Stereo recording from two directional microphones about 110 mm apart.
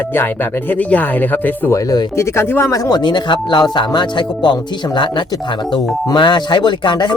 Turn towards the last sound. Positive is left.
turn(degrees=45)  # may be behind; listen again after turning